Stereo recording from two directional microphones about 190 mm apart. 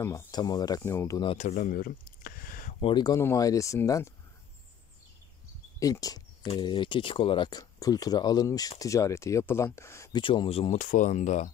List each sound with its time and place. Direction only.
0.0 s speech: 20° left (ahead or behind)
1.4 s a sound: 40° left (ahead or behind)
2.8 s speech: 25° left (ahead or behind)
5.8 s a sound: 20° left (ahead or behind)
6.5 s speech: 25° left (ahead or behind)
10.2 s speech: 25° left (ahead or behind)